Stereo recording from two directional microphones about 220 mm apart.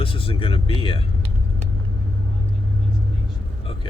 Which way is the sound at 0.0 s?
25° left (ahead or behind).